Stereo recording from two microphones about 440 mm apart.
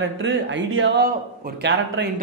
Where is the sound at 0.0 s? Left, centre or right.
Right.